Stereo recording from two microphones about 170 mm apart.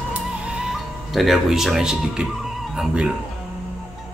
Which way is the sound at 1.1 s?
Centre (ahead or behind).